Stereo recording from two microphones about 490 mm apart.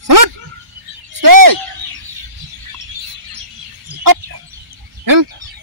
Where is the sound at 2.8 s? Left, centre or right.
Right.